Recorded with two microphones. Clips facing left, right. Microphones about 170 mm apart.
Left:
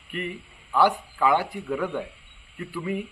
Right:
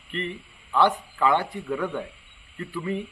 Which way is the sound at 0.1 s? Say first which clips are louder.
Right 1 dB; 10° left (ahead or behind).